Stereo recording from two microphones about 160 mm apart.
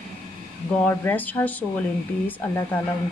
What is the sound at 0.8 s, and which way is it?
Speech, 10° left (ahead or behind).